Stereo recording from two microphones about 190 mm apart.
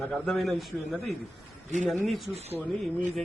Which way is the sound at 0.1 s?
Centre (ahead or behind).